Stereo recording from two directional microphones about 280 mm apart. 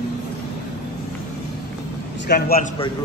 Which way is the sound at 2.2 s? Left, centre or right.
Left.